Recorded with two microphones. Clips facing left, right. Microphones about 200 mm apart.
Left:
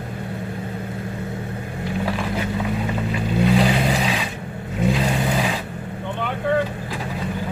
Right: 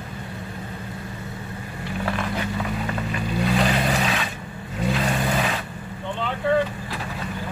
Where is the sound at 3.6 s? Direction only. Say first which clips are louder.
Left 3 dB; 5° left (ahead or behind).